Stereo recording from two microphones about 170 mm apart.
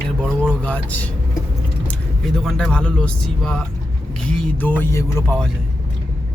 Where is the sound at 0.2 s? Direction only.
5° left (ahead or behind).